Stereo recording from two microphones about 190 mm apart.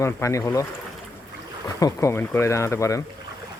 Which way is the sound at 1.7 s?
15° left (ahead or behind).